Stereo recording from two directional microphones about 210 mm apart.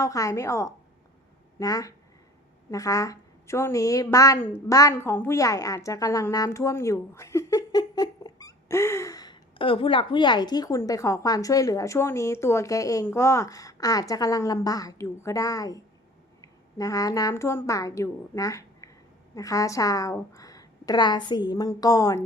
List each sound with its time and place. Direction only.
0.0 s a woman's voice: 15° left (ahead or behind)